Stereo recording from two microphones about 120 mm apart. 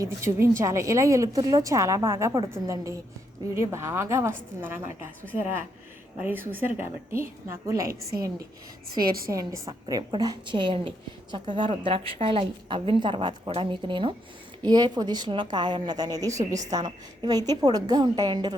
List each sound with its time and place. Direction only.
0.0 s a woman's voice: 25° right (ahead or behind)
6.1 s a woman's voice: 15° right (ahead or behind); by 18.5 s 35° right (ahead or behind)